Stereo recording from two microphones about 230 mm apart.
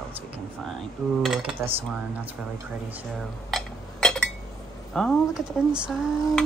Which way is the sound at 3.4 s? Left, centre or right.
Centre.